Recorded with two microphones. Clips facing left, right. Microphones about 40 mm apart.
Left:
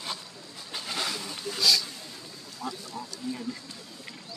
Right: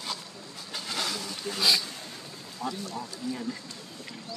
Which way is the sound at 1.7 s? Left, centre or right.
Right.